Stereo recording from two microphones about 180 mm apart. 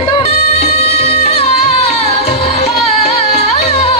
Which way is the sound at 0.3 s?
35° left (ahead or behind).